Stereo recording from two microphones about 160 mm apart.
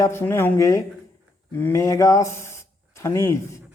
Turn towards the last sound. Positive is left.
turn(degrees=15)  # may be behind; listen again after turning